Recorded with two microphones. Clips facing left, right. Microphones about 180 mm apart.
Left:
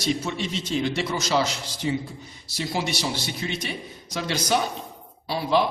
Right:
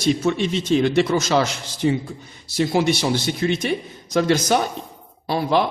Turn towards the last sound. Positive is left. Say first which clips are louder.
# right 3 dB
turn(degrees=-50)  # may be behind; listen again after turning